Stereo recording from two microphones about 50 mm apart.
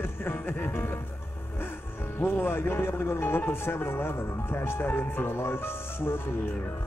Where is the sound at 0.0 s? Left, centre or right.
Left.